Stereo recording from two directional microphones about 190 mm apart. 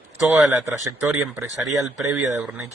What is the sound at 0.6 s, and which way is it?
Speech, 15° right (ahead or behind).